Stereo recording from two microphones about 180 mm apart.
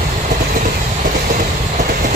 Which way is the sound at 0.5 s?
50° right (ahead or behind).